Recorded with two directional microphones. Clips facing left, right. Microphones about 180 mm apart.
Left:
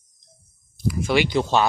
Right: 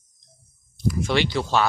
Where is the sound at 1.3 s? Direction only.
20° left (ahead or behind).